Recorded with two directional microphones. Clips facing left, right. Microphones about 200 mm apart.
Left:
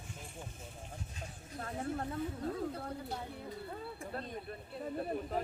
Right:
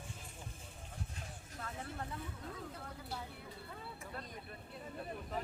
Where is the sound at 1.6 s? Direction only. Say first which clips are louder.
Left 7 dB; 35° left (ahead or behind).